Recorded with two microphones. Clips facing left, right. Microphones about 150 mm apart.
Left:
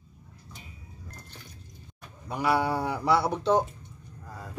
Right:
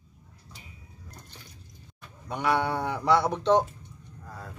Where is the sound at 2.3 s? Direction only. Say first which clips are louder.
Left 1 dB; 5° left (ahead or behind).